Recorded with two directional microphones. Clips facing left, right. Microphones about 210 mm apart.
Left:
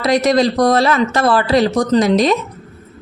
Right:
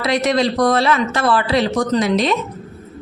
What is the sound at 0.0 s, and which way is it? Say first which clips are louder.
Speech: left 4 dB; 40° left (ahead or behind).